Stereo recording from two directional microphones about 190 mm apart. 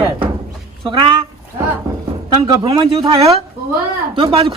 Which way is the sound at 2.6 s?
25° right (ahead or behind).